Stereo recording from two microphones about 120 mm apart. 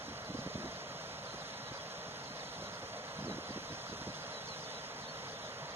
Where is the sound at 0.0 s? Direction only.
20° right (ahead or behind).